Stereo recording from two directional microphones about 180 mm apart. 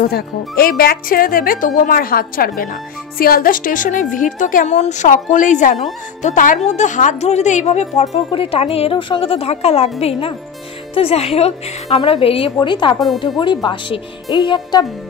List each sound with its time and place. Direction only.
0.1 s a woman's voice: 55° left (ahead or behind); by 14.9 s 25° left (ahead or behind)